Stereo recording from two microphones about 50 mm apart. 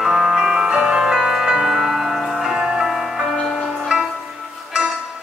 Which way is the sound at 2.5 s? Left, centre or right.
Centre.